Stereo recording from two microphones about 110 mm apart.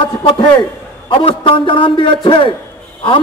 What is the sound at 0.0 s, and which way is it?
A man's voice, 50° left (ahead or behind).